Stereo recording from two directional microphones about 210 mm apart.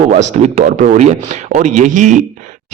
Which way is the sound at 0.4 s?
35° right (ahead or behind).